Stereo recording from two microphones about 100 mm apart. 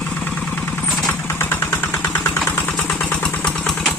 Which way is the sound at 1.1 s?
20° left (ahead or behind).